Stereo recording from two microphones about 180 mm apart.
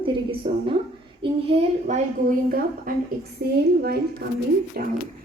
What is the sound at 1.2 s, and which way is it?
Speech, 35° right (ahead or behind).